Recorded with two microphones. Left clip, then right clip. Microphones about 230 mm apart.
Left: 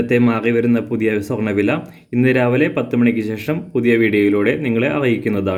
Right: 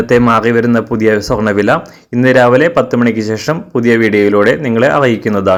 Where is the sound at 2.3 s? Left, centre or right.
Centre.